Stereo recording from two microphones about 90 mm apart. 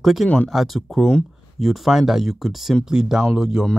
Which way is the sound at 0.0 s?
Centre (ahead or behind).